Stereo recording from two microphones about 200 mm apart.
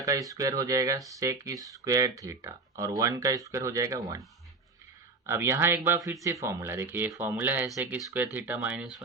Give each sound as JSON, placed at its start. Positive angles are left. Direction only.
{"t": 0.0, "sound": "speech", "side_deg": -15}
{"t": 5.2, "sound": "speech", "side_deg": -10}